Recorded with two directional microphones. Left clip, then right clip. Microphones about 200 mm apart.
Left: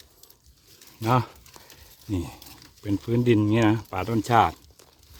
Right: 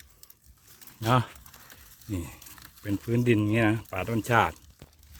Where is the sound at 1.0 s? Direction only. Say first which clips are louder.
Left 2 dB; 15° left (ahead or behind).